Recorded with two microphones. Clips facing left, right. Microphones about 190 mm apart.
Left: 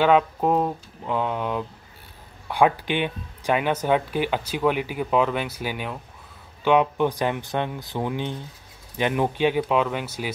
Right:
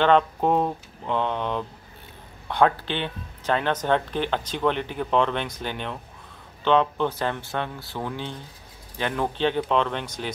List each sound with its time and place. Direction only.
0.0 s speech: 5° left (ahead or behind)